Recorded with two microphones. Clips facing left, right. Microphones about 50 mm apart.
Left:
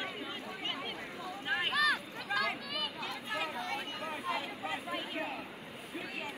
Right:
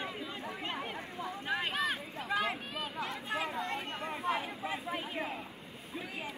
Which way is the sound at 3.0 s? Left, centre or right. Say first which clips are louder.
Right 2 dB; right.